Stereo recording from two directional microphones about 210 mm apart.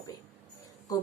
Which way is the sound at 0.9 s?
15° left (ahead or behind).